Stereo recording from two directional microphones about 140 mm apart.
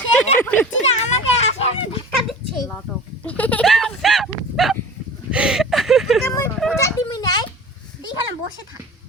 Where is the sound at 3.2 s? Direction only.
10° left (ahead or behind).